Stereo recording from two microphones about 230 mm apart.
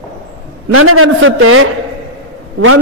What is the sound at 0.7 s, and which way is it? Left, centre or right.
A man's voice, right.